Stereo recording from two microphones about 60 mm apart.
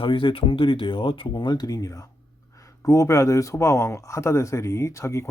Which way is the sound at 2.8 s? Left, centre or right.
Left.